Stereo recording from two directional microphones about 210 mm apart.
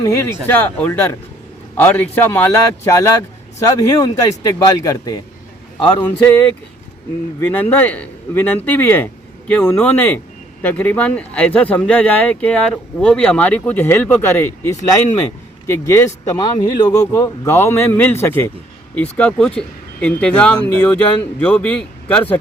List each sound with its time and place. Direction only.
0.0 s speech: 15° left (ahead or behind)
7.4 s speech: 10° left (ahead or behind)